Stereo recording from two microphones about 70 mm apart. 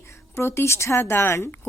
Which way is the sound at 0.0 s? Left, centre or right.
Left.